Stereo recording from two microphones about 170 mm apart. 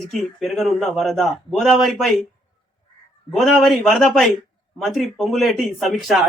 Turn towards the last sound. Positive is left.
turn(degrees=0)  # may be behind; listen again after turning